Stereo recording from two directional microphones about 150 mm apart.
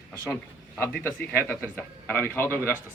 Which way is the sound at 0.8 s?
15° left (ahead or behind).